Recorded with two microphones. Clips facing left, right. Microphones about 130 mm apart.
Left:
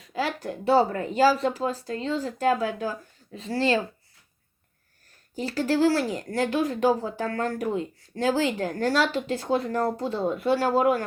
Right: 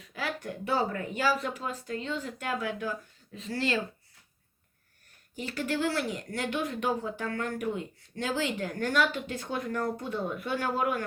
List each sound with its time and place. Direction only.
0.3 s speech: 30° left (ahead or behind)
5.3 s speech: 35° left (ahead or behind)